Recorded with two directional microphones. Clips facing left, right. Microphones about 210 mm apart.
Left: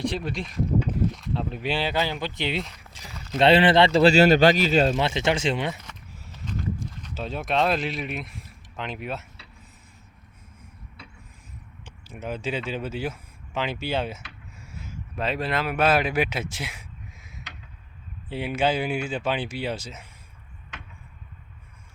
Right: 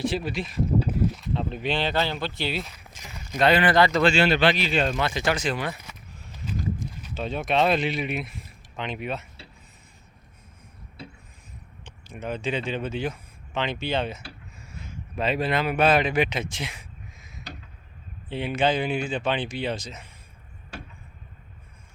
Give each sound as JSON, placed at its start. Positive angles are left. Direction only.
{"t": 0.0, "sound": "speech", "side_deg": -5}
{"t": 2.9, "sound": "speech", "side_deg": 35}
{"t": 6.3, "sound": "a sound", "side_deg": -10}
{"t": 7.1, "sound": "speech", "side_deg": 0}
{"t": 12.0, "sound": "a man's voice", "side_deg": 5}